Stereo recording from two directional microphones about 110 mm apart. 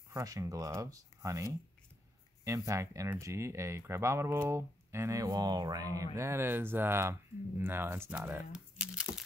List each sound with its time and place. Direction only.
0.1 s speech: 30° right (ahead or behind)
8.5 s speech: 10° right (ahead or behind)